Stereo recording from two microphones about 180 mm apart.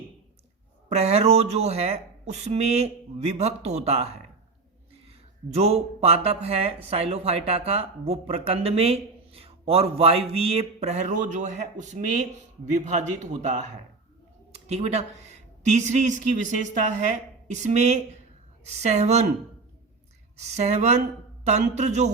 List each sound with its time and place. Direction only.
0.9 s speech: 35° right (ahead or behind)
5.5 s speech: 35° right (ahead or behind)
20.3 s speech: 40° right (ahead or behind)